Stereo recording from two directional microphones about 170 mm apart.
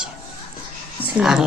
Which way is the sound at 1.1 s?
5° right (ahead or behind).